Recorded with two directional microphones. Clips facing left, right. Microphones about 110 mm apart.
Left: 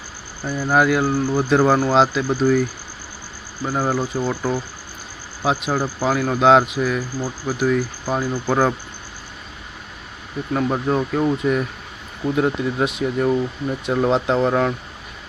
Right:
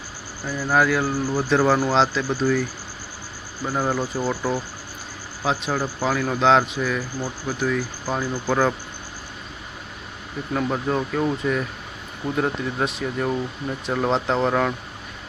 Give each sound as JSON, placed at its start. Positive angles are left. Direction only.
{"t": 0.4, "sound": "speech", "side_deg": 30}
{"t": 0.7, "sound": "speech", "side_deg": 5}
{"t": 3.6, "sound": "speech", "side_deg": 5}
{"t": 10.5, "sound": "speech", "side_deg": 10}